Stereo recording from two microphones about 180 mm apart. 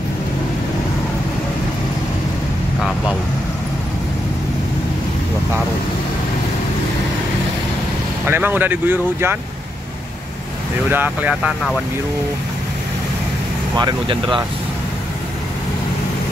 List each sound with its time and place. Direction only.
8.3 s speech: 10° right (ahead or behind)
10.9 s speech: 10° right (ahead or behind)
13.7 s speech: 25° right (ahead or behind)